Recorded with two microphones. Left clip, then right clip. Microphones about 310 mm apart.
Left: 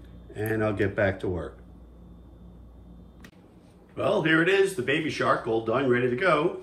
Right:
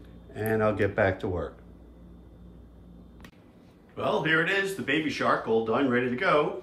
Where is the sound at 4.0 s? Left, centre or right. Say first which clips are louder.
Left 2 dB; centre.